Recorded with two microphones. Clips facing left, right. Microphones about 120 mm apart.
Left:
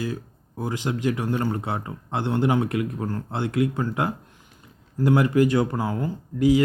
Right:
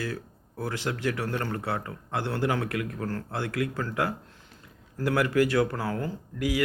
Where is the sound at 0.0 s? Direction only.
15° left (ahead or behind).